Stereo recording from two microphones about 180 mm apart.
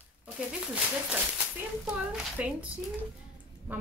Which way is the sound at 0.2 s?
5° right (ahead or behind).